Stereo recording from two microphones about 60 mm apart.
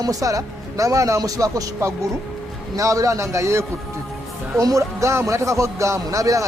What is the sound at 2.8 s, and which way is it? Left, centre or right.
Speech, right.